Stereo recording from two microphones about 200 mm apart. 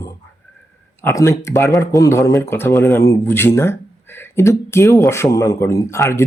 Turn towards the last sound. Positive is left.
turn(degrees=15)  # may be behind; listen again after turning